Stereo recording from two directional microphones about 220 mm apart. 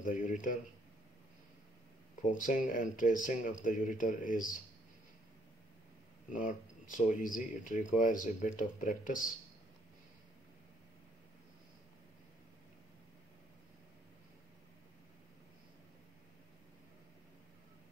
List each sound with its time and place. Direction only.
0.0 s speech: 35° left (ahead or behind)
2.2 s speech: 35° left (ahead or behind)
6.3 s speech: 35° left (ahead or behind)